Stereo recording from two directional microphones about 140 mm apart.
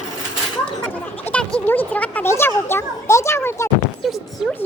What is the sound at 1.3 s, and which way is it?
Music, 10° left (ahead or behind).